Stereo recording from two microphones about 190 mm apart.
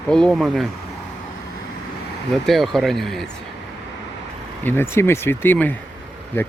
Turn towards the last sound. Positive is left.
turn(degrees=10)  # may be behind; listen again after turning